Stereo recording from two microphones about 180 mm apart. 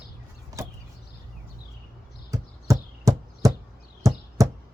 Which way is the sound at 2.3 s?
15° right (ahead or behind).